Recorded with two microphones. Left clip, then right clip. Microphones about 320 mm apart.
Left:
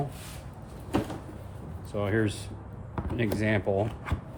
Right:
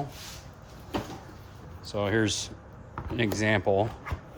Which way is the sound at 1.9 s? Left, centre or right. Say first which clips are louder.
Right 2 dB; right.